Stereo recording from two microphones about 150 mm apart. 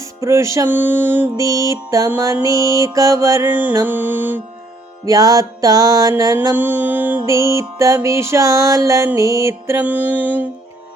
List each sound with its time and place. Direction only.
0.0 s music: 20° right (ahead or behind)
5.0 s music: 25° right (ahead or behind)
6.5 s mantra: 15° right (ahead or behind)
7.3 s music: 20° right (ahead or behind)